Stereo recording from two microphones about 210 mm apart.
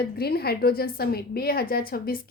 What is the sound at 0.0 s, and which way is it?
A woman's voice, 45° left (ahead or behind).